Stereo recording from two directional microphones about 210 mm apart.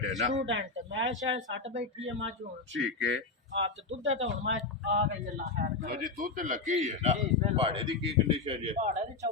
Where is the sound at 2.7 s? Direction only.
65° right (ahead or behind).